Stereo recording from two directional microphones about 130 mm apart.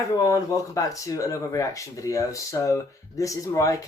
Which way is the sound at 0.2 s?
30° left (ahead or behind).